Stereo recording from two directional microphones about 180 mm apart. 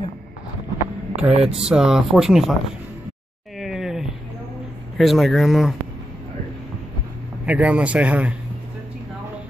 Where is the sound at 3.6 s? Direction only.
Centre (ahead or behind).